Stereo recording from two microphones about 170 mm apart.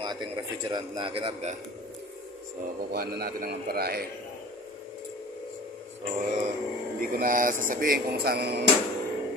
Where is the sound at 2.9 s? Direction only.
65° right (ahead or behind).